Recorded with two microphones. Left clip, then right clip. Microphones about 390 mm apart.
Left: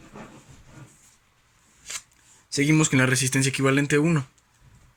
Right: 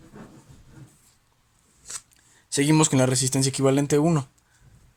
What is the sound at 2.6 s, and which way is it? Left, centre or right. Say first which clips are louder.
Speech: right 1 dB; centre.